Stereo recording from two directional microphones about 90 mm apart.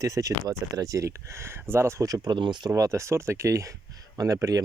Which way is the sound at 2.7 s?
30° right (ahead or behind).